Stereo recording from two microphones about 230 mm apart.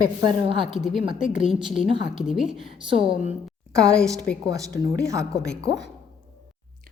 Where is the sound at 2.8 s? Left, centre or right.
Right.